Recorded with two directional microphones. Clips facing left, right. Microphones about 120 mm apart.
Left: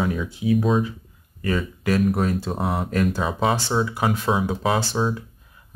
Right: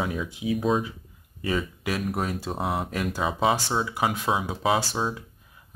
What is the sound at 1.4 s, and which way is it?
Speech, 10° right (ahead or behind).